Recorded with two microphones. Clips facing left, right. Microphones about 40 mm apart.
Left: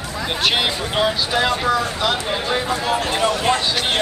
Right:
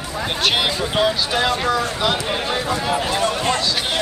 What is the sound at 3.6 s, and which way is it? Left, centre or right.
Speech, left.